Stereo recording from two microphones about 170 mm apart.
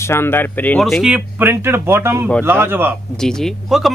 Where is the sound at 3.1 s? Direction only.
5° left (ahead or behind).